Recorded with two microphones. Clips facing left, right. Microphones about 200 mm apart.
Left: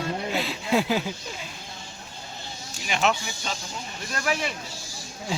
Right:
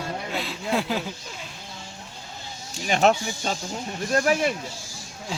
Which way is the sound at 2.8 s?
45° right (ahead or behind).